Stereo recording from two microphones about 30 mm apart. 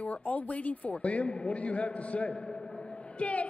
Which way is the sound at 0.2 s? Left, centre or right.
Left.